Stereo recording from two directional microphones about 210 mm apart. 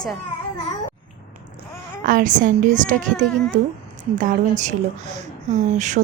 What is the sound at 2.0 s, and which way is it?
A woman's voice, 40° right (ahead or behind).